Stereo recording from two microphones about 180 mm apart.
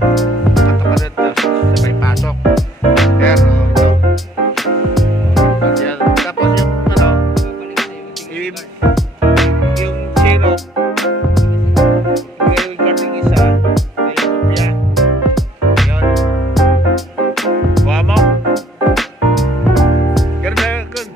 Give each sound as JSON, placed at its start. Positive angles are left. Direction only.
{"t": 0.1, "sound": "music", "side_deg": 0}
{"t": 1.9, "sound": "music", "side_deg": 20}
{"t": 2.5, "sound": "music", "side_deg": 0}
{"t": 8.9, "sound": "music", "side_deg": 0}